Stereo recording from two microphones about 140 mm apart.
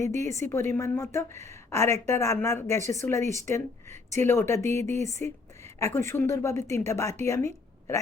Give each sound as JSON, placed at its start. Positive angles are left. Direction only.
{"t": 0.2, "sound": "a woman's voice", "side_deg": 20}